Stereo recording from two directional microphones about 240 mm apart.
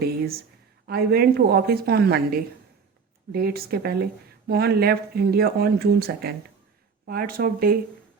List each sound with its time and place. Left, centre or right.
0.0 s speech: right